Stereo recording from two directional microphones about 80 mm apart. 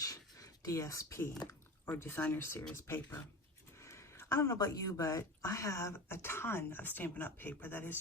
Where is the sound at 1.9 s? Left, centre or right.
Left.